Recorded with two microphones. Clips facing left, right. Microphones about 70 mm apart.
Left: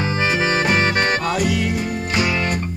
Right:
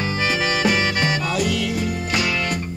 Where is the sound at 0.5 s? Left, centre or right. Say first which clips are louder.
Left 2 dB; left.